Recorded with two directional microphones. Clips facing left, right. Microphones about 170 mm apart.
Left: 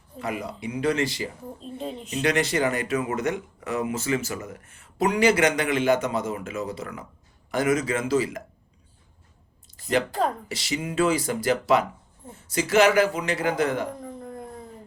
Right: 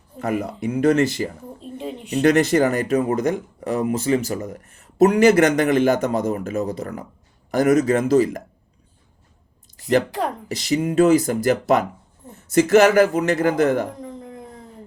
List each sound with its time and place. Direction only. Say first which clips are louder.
0.2 s a man's voice: right 7 dB; 45° right (ahead or behind)
1.6 s speech: right 3 dB; 10° right (ahead or behind)
2.1 s a man's voice: right 8 dB; 45° right (ahead or behind)
10.5 s a man's voice: right 8 dB; 45° right (ahead or behind)